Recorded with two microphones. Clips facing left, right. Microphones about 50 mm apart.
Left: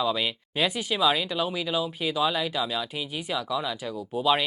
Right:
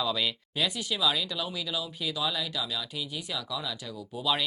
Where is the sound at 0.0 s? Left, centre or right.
Left.